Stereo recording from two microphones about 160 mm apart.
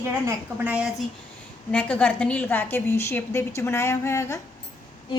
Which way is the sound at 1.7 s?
10° left (ahead or behind).